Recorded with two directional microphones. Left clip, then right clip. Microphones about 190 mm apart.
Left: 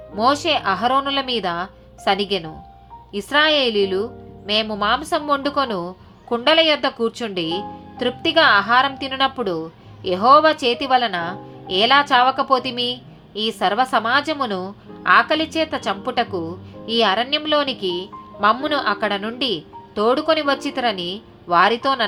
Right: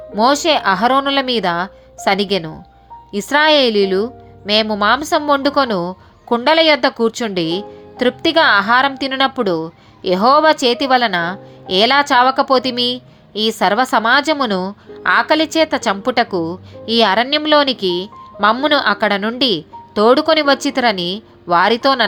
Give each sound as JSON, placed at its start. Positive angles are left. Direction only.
{"t": 0.2, "sound": "a woman's voice", "side_deg": -45}